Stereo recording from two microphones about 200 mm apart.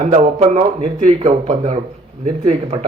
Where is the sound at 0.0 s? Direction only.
35° right (ahead or behind).